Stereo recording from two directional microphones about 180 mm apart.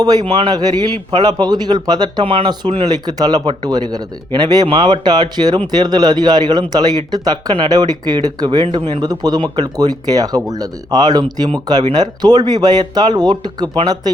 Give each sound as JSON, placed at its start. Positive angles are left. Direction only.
{"t": 0.0, "sound": "a man's voice", "side_deg": -20}